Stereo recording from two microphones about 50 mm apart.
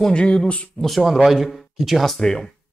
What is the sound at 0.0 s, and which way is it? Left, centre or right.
Speech, centre.